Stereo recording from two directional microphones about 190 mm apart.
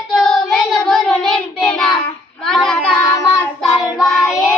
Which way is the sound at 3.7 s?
20° left (ahead or behind).